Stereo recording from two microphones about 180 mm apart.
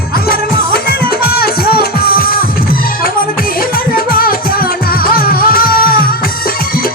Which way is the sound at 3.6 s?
55° left (ahead or behind).